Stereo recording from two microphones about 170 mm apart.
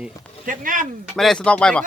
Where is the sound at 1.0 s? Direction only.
Centre (ahead or behind).